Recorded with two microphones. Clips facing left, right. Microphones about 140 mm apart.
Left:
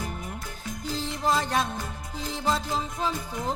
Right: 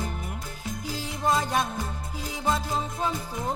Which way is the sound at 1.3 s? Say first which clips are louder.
Right 1 dB; 5° right (ahead or behind).